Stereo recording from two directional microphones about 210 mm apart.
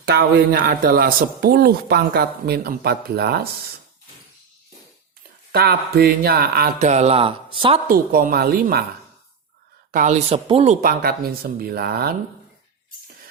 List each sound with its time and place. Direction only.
0.1 s speech: 50° right (ahead or behind)
5.5 s speech: 50° right (ahead or behind); by 7.8 s 25° right (ahead or behind)
7.9 s speech: 40° right (ahead or behind)
9.9 s speech: 35° right (ahead or behind)